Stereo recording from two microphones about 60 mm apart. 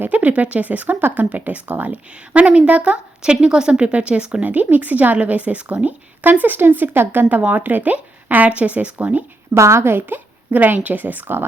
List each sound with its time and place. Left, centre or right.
0.0 s a woman's voice: right
9.6 s a woman's voice: right